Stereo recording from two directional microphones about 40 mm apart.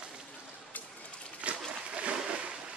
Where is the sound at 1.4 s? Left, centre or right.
Right.